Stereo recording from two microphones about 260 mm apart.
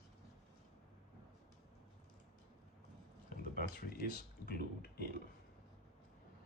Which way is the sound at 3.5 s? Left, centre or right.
Left.